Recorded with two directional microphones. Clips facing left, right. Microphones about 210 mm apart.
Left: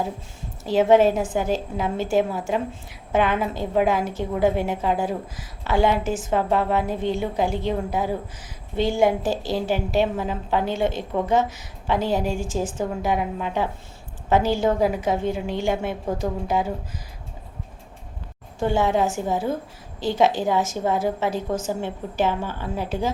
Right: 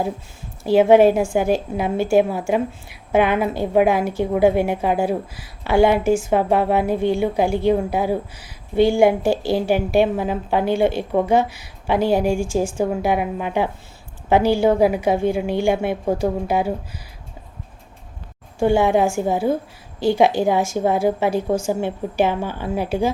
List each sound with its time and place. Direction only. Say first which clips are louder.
0.6 s a woman's voice: right 4 dB; 10° right (ahead or behind)
18.6 s a woman's voice: right 5 dB; 15° right (ahead or behind)